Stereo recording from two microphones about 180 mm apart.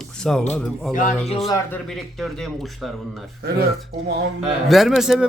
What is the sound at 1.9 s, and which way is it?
A man's voice, centre (ahead or behind).